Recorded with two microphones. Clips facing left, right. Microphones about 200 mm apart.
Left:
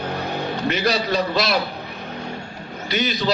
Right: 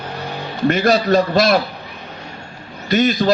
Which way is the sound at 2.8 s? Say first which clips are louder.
Right 8 dB; 50° right (ahead or behind).